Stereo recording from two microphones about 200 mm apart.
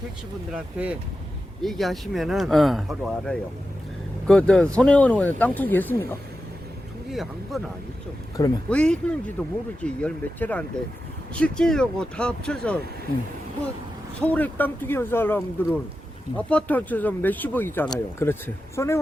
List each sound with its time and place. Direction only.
0.5 s speech: 5° right (ahead or behind); by 6.1 s 10° left (ahead or behind)
7.1 s speech: centre (ahead or behind)
8.4 s speech: 20° left (ahead or behind)
8.7 s speech: 5° left (ahead or behind)
14.2 s speech: 10° left (ahead or behind)